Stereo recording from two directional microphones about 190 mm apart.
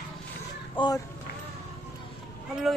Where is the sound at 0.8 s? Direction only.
25° left (ahead or behind).